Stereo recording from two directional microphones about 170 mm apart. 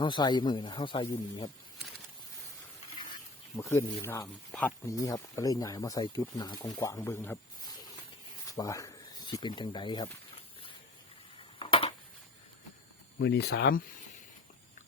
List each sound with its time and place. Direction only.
0.0 s speech: 25° left (ahead or behind)
3.7 s a man's voice: 15° left (ahead or behind)
8.4 s a sound: 20° left (ahead or behind)
13.1 s speech: 80° left